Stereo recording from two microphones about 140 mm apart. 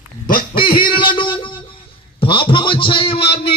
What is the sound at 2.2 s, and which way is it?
A man's voice, 40° left (ahead or behind).